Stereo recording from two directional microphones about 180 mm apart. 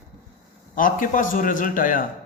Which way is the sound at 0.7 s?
50° left (ahead or behind).